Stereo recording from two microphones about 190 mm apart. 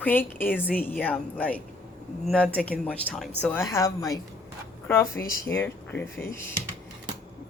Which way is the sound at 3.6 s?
20° left (ahead or behind).